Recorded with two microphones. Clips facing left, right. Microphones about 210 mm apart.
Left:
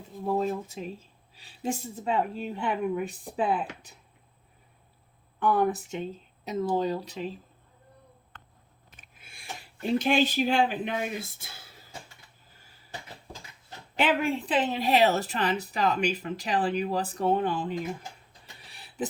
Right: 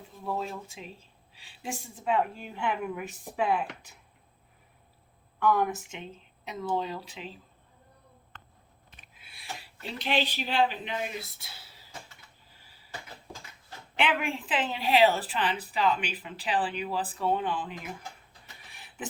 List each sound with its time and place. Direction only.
0.3 s a woman's voice: 40° left (ahead or behind)
5.4 s a woman's voice: 35° left (ahead or behind)
9.0 s speech: 45° left (ahead or behind)
13.9 s a woman's voice: 40° left (ahead or behind)
18.7 s a sound: 35° left (ahead or behind)